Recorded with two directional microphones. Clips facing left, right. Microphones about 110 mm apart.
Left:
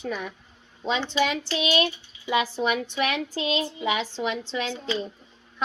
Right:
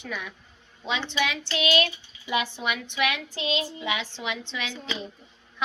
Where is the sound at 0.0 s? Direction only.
40° left (ahead or behind).